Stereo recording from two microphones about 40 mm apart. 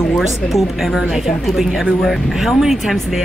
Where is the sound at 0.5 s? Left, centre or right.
Centre.